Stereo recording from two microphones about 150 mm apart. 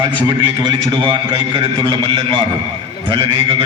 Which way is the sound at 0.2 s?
30° right (ahead or behind).